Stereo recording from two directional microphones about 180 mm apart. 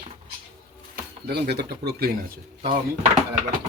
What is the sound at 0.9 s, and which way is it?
Speech, 65° right (ahead or behind).